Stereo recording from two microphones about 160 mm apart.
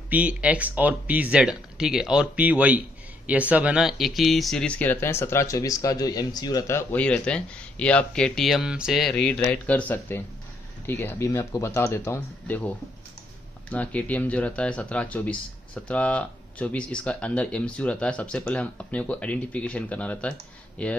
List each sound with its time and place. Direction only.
0.1 s speech: 10° right (ahead or behind); by 20.9 s 5° left (ahead or behind)